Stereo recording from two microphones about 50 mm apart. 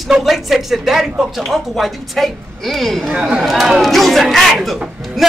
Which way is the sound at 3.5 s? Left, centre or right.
Centre.